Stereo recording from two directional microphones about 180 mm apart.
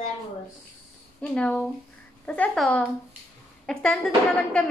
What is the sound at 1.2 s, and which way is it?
Female singing, 5° left (ahead or behind).